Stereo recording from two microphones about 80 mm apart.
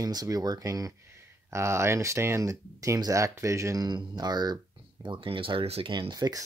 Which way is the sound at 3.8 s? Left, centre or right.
Right.